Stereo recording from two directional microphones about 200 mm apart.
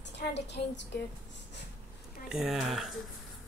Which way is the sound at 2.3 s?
5° right (ahead or behind).